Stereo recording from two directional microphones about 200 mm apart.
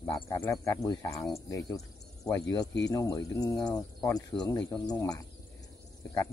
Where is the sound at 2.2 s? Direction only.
15° left (ahead or behind).